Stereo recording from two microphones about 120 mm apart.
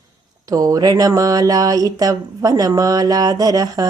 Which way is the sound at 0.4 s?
30° right (ahead or behind).